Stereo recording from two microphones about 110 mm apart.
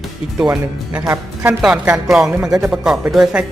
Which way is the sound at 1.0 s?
25° right (ahead or behind).